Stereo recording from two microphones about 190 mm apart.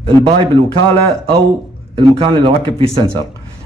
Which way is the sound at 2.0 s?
30° right (ahead or behind).